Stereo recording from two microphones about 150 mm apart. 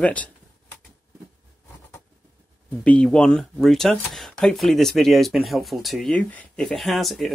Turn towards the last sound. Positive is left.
turn(degrees=0)  # may be behind; listen again after turning